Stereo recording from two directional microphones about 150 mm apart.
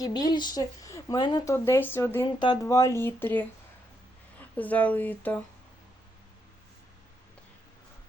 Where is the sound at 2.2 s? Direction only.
30° left (ahead or behind); by 3.4 s 15° left (ahead or behind).